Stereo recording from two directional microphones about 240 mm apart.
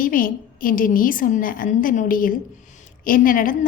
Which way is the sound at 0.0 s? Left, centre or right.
Left.